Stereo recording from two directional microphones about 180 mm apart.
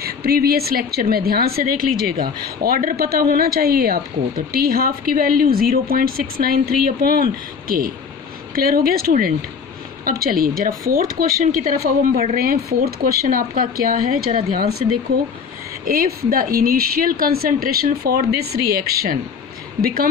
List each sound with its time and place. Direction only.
0.0 s a woman's voice: 60° right (ahead or behind)
15.8 s a woman's voice: 55° right (ahead or behind)